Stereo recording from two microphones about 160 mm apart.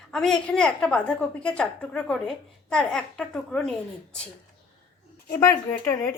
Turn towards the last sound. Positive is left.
turn(degrees=15)  # may be behind; listen again after turning